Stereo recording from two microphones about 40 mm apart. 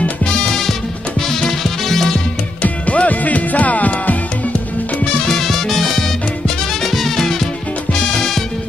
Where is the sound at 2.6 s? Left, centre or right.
Left.